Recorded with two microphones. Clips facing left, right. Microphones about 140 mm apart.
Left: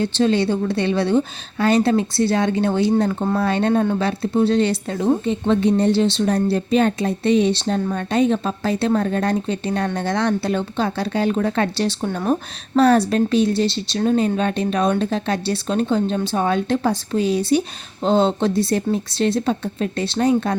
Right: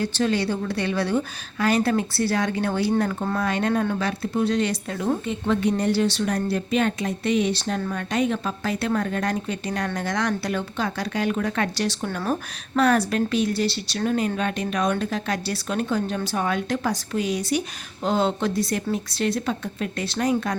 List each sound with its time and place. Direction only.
0.0 s speech: 25° left (ahead or behind)